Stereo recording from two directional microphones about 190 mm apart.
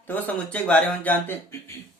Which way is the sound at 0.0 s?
10° left (ahead or behind).